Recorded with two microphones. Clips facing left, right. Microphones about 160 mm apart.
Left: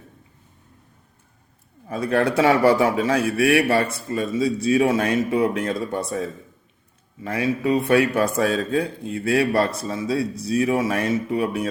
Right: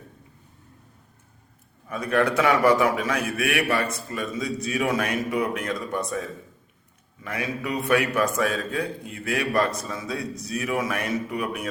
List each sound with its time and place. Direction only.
1.9 s a man's voice: 30° left (ahead or behind)